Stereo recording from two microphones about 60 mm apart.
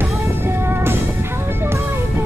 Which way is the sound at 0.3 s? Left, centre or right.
Right.